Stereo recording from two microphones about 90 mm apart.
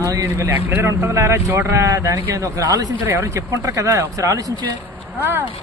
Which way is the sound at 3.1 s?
30° right (ahead or behind).